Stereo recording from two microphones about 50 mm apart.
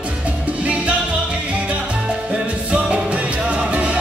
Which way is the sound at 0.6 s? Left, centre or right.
Right.